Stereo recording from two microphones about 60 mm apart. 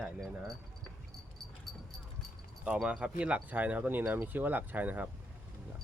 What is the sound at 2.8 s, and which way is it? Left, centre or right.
Speech, centre.